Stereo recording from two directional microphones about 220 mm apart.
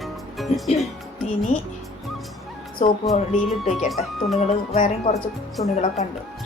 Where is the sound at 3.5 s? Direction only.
Centre (ahead or behind).